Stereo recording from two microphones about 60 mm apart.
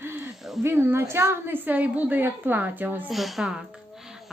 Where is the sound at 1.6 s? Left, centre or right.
Right.